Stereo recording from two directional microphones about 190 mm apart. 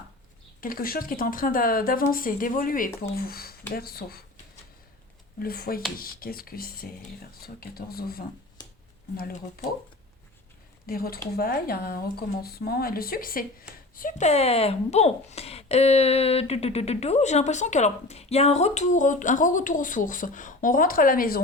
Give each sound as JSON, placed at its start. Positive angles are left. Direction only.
{"t": 0.6, "sound": "speech", "side_deg": 50}
{"t": 5.4, "sound": "speech", "side_deg": 50}
{"t": 10.8, "sound": "speech", "side_deg": 50}